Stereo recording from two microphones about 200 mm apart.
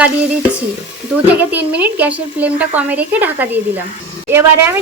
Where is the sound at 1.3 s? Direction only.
10° right (ahead or behind).